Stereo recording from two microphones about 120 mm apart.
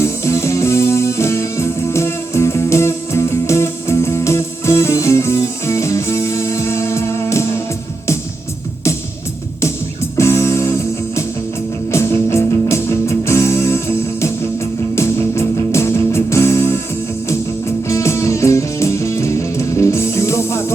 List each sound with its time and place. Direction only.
0.0 s music: 25° left (ahead or behind)
10.2 s music: 20° left (ahead or behind)
11.9 s music: 20° left (ahead or behind)
17.8 s music: 25° left (ahead or behind)